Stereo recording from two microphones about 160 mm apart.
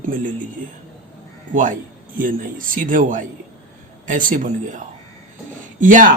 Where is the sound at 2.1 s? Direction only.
60° right (ahead or behind).